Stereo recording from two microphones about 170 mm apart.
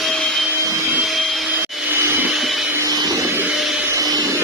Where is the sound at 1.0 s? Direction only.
Centre (ahead or behind).